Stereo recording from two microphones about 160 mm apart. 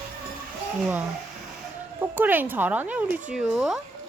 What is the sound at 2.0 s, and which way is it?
Speech, 10° right (ahead or behind).